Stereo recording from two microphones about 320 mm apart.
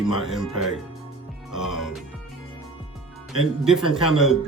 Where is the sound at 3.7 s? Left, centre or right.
Centre.